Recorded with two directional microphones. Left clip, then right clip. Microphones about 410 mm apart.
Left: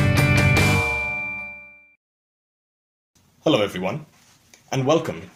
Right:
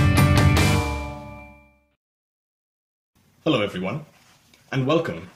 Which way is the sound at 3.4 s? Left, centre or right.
Centre.